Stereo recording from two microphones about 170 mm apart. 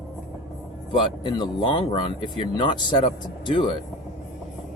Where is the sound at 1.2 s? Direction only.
25° left (ahead or behind).